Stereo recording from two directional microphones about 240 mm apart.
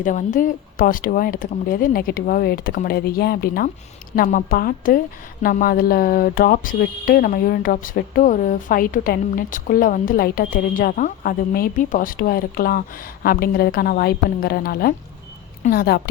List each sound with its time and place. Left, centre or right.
0.0 s speech: left